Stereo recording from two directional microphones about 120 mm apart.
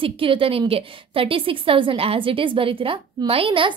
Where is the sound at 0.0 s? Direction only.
50° right (ahead or behind).